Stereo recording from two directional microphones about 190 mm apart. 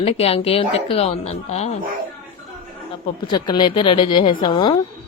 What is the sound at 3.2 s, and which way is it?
A woman's voice, 25° left (ahead or behind).